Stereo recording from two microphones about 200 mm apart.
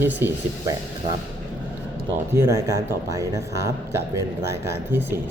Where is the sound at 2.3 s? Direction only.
15° right (ahead or behind).